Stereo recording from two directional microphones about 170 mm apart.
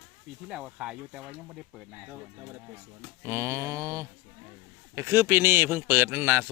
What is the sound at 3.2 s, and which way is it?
Mantra, 15° right (ahead or behind).